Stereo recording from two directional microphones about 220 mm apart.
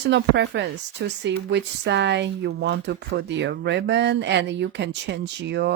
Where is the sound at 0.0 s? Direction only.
50° right (ahead or behind).